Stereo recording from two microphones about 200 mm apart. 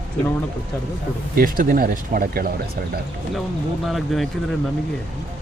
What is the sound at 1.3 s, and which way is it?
Speech, 45° right (ahead or behind).